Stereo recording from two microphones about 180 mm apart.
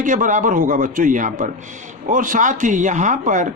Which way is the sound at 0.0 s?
45° right (ahead or behind).